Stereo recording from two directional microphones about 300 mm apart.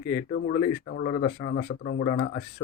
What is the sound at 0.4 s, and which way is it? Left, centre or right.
A man's voice, left.